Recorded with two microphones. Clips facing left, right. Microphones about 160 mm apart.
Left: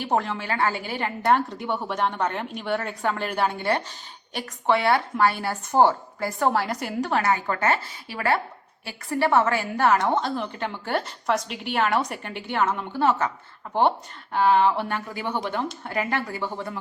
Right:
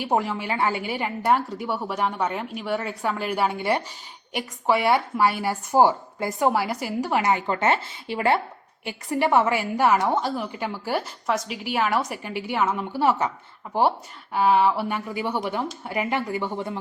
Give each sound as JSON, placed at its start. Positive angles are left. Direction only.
{"t": 0.0, "sound": "a woman's voice", "side_deg": -10}